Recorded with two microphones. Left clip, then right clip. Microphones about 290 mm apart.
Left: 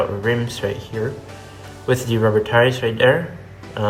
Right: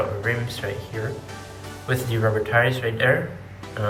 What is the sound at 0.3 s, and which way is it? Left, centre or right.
Speech, centre.